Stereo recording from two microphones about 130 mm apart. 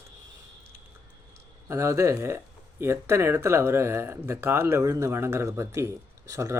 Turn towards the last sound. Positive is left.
turn(degrees=-25)  # may be behind; listen again after turning